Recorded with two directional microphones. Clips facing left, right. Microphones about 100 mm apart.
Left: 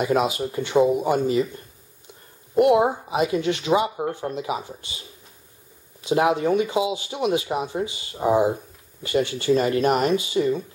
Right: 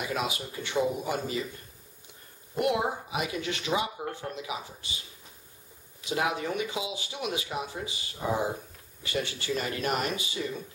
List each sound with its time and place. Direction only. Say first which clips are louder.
0.2 s speech: left 9 dB; 25° left (ahead or behind)
2.5 s speech: left 10 dB; 25° left (ahead or behind)
5.9 s speech: left 9 dB; 30° left (ahead or behind)